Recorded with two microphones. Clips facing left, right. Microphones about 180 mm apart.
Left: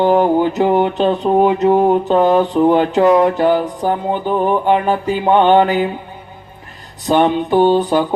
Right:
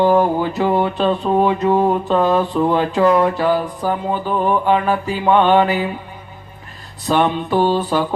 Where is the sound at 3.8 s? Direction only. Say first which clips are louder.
Left 3 dB; 20° left (ahead or behind).